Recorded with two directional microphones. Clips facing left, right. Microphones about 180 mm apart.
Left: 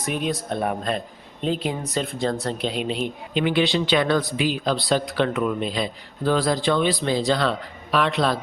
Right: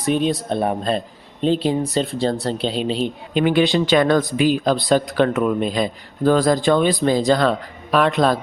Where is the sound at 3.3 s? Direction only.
45° right (ahead or behind).